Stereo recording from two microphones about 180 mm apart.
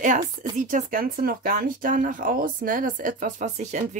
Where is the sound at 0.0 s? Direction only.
45° right (ahead or behind).